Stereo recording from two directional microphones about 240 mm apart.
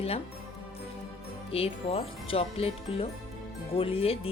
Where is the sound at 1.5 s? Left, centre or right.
Left.